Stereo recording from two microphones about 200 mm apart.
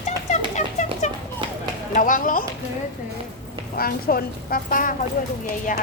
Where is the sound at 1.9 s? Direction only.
45° left (ahead or behind).